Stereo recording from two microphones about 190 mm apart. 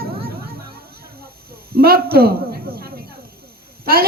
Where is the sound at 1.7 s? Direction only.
50° right (ahead or behind).